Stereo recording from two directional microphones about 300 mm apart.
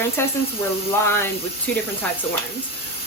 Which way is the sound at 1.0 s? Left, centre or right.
Centre.